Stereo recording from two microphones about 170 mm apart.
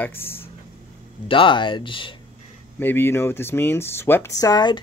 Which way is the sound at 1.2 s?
30° left (ahead or behind).